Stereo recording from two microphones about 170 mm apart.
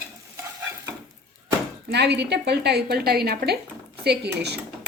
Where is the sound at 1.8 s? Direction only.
75° right (ahead or behind).